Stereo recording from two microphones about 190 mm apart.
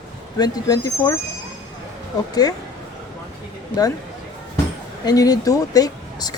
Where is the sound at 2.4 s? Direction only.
20° left (ahead or behind).